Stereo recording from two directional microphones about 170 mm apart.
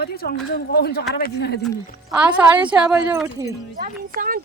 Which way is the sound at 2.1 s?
10° right (ahead or behind).